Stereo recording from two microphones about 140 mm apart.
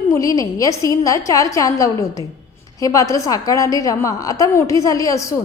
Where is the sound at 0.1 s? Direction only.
25° left (ahead or behind).